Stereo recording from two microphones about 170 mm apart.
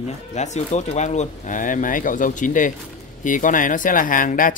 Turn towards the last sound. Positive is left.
turn(degrees=55)  # may be behind; listen again after turning